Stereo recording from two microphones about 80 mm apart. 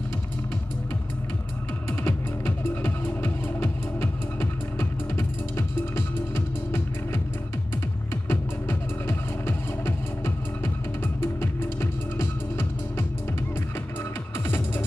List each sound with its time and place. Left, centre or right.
1.9 s music: left
8.3 s music: left
14.4 s music: left